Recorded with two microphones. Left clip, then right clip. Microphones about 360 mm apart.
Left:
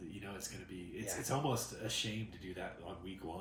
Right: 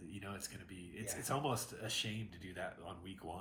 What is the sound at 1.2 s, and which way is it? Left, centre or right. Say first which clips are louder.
Speech: left 1 dB; centre.